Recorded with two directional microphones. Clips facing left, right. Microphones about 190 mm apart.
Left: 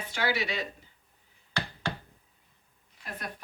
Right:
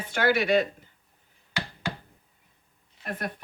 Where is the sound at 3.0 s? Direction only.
55° right (ahead or behind).